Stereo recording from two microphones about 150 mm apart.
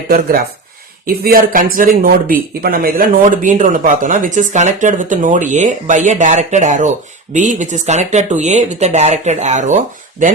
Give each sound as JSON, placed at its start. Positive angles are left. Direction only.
{"t": 1.0, "sound": "speech", "side_deg": -85}